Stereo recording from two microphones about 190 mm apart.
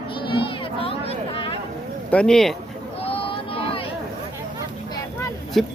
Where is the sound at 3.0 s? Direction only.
30° left (ahead or behind).